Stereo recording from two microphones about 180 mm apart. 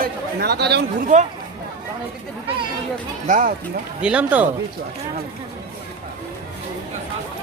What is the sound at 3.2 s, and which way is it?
Speech, 45° right (ahead or behind).